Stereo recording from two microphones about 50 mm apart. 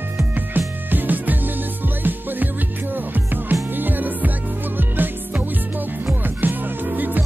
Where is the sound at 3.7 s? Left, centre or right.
Right.